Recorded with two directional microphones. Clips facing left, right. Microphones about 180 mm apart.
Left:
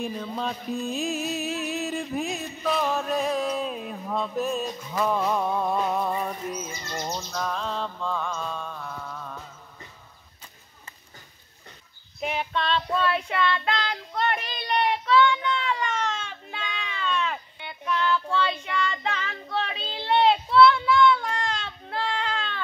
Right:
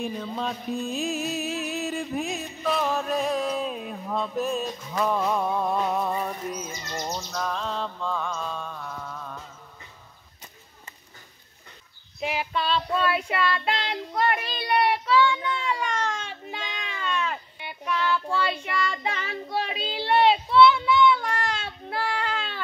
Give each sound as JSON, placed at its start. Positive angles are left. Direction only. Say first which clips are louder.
{"t": 0.0, "sound": "music", "louder": "even", "side_deg": 0}
{"t": 12.2, "sound": "child singing", "louder": "even", "side_deg": -5}
{"t": 16.3, "sound": "a sound", "louder": "right 1 dB", "side_deg": -10}
{"t": 17.3, "sound": "child singing", "louder": "even", "side_deg": -10}
{"t": 21.5, "sound": "baby cry", "louder": "right 1 dB", "side_deg": -5}